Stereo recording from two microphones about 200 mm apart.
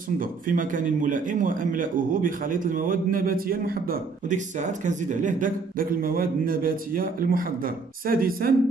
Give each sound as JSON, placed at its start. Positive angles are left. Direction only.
{"t": 0.2, "sound": "a man's voice", "side_deg": -45}